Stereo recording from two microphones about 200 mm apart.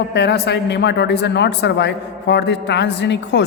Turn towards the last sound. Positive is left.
turn(degrees=60)  # may be behind; listen again after turning